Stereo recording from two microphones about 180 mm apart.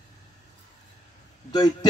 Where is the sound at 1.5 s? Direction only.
20° left (ahead or behind).